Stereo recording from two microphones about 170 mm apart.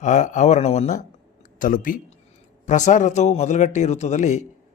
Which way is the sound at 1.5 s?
50° left (ahead or behind).